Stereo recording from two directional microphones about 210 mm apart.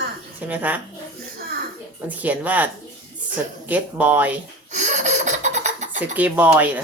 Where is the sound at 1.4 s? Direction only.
45° right (ahead or behind).